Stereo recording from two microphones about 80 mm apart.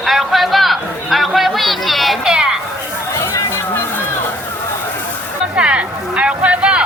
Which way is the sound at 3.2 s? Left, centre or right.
Left.